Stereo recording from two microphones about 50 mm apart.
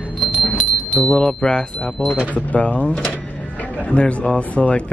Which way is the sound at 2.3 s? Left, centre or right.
Left.